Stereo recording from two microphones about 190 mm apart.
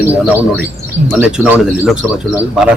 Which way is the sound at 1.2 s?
5° right (ahead or behind).